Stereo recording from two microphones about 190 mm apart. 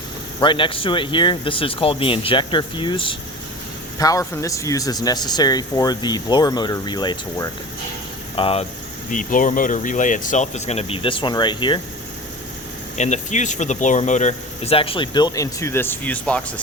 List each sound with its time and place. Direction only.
0.3 s speech: 25° left (ahead or behind)
9.0 s speech: 45° left (ahead or behind); by 11.8 s 25° left (ahead or behind)
13.0 s speech: 40° left (ahead or behind); by 16.6 s 5° left (ahead or behind)